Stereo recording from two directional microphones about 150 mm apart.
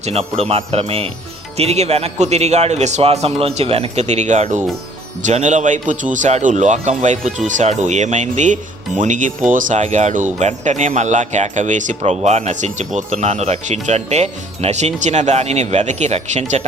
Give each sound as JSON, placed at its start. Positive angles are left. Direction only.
{"t": 0.0, "sound": "speech", "side_deg": -45}